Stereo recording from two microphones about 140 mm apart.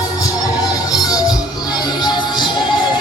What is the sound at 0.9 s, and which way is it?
Music, 25° left (ahead or behind).